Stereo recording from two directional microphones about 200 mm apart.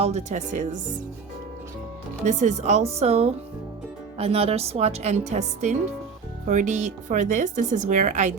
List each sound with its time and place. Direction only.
0.0 s speech: 35° right (ahead or behind)
2.2 s speech: 35° right (ahead or behind)